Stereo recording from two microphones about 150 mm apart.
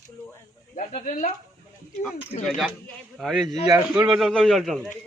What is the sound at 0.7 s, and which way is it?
Speech, 45° left (ahead or behind).